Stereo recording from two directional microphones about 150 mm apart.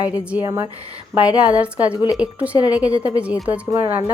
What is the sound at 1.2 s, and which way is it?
A woman's voice, 10° right (ahead or behind).